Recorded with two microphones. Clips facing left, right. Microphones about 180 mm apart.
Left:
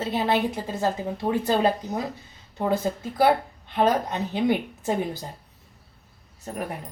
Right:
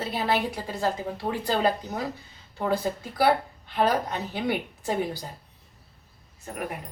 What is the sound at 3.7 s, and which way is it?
A woman's voice, 20° left (ahead or behind).